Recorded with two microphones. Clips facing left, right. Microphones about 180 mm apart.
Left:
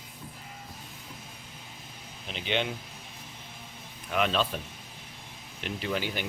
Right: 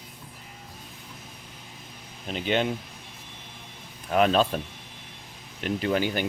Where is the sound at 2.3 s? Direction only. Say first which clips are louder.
Right 5 dB; 45° right (ahead or behind).